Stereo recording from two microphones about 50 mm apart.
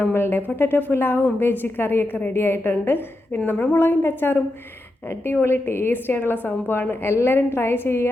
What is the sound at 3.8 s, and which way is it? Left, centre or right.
A woman's voice, left.